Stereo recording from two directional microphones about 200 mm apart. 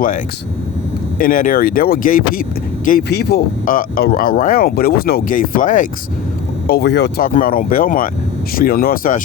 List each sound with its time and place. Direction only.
1.2 s speech: 45° left (ahead or behind)
6.7 s speech: 55° left (ahead or behind)